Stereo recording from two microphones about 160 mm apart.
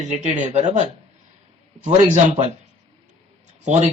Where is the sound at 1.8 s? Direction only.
45° right (ahead or behind).